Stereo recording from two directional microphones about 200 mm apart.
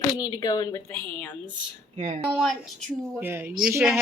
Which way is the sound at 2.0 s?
35° right (ahead or behind).